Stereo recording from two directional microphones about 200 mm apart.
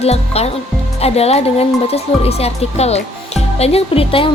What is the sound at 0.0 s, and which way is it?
Speech, 30° left (ahead or behind).